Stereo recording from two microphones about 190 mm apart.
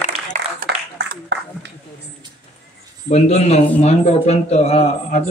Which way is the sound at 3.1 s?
35° left (ahead or behind).